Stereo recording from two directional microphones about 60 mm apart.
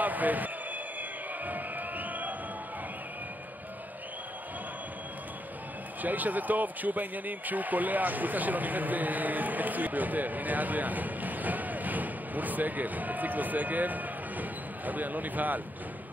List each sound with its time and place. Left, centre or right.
0.0 s a sound: right
1.4 s music: right
6.0 s speech: right